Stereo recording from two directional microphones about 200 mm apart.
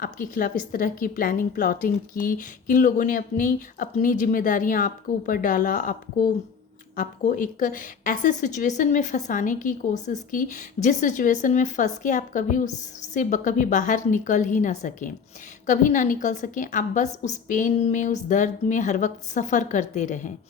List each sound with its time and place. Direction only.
0.0 s a woman's voice: 45° left (ahead or behind)